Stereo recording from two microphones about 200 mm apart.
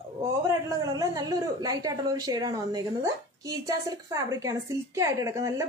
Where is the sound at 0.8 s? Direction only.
15° right (ahead or behind).